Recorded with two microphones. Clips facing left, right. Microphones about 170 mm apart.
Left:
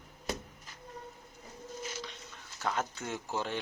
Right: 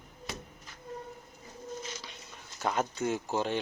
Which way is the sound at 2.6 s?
15° right (ahead or behind).